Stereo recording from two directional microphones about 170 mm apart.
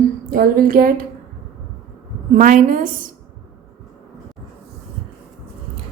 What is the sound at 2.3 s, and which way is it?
Speech, 50° right (ahead or behind).